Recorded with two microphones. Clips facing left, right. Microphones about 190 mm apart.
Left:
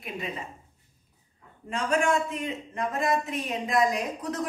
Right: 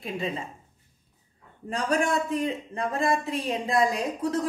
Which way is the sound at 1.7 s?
35° right (ahead or behind).